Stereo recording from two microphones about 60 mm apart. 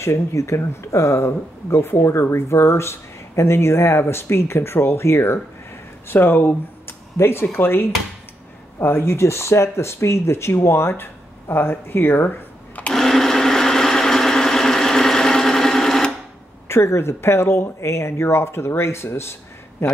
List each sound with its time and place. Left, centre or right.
0.0 s speech: left
6.0 s speech: left
7.4 s dishes: left
8.7 s speech: left
12.9 s sewing machine: centre
16.6 s speech: left